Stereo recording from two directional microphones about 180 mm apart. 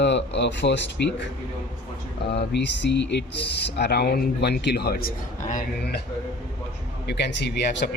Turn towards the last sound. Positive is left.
turn(degrees=65)  # may be behind; listen again after turning